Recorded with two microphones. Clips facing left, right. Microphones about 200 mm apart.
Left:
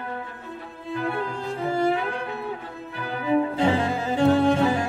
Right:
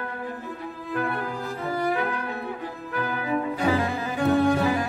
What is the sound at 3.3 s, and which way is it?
Cello, 25° left (ahead or behind).